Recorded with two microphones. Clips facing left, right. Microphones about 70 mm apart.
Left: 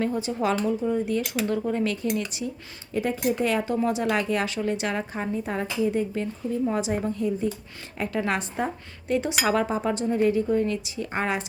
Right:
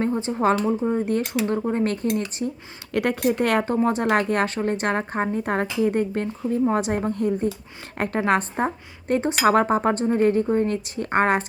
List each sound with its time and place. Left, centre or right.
0.0 s a woman's voice: right
2.9 s speech: right
3.8 s a woman's voice: right